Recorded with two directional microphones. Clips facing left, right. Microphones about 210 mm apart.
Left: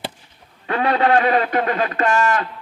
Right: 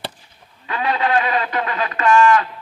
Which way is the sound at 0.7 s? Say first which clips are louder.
Left 3 dB; 55° left (ahead or behind).